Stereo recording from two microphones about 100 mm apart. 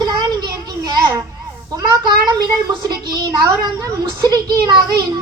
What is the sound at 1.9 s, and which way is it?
Speech, 45° right (ahead or behind).